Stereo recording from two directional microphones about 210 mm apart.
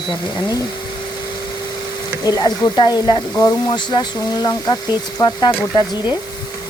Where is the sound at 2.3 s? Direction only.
20° left (ahead or behind).